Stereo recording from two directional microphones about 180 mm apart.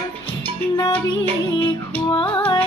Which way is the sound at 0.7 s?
20° left (ahead or behind).